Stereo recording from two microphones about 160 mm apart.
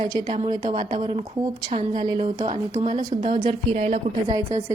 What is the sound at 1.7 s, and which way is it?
Speech, 40° right (ahead or behind).